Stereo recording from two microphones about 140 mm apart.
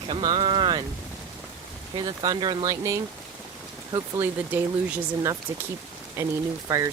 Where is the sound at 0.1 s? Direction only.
35° right (ahead or behind).